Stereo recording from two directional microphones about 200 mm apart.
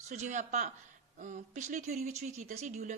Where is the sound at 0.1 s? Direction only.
35° right (ahead or behind).